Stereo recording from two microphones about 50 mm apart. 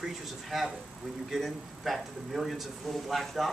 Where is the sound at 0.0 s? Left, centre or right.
Centre.